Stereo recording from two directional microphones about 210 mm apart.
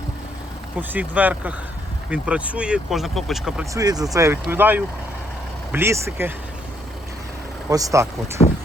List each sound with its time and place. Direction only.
0.8 s speech: 10° right (ahead or behind)
3.8 s speech: 15° right (ahead or behind)
7.7 s speech: 15° right (ahead or behind)